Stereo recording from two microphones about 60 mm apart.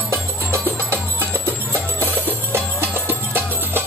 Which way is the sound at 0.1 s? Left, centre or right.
Right.